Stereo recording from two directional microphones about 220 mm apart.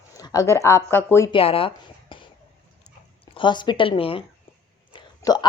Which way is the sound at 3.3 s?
20° left (ahead or behind).